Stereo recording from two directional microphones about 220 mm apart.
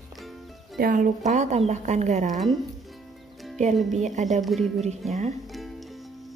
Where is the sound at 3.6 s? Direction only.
35° right (ahead or behind).